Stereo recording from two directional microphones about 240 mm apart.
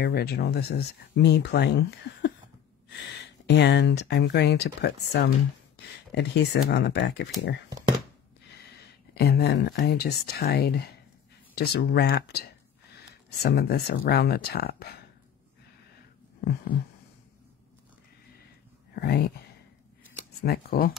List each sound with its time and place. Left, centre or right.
0.0 s speech: left
3.4 s speech: left
9.1 s speech: left
16.3 s heart sounds: left
18.9 s speech: left
20.4 s speech: left